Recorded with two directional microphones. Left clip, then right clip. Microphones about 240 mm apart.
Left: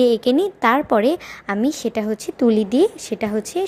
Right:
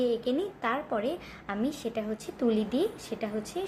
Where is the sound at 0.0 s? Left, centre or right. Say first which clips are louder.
Left 12 dB; left.